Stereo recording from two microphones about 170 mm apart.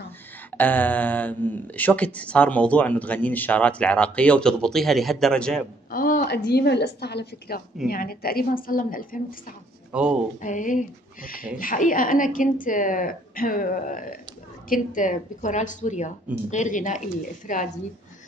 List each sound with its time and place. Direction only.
0.6 s speech: 10° left (ahead or behind)
5.9 s a woman's voice: 55° left (ahead or behind)
9.9 s speech: 5° right (ahead or behind)
10.4 s a woman's voice: 50° left (ahead or behind)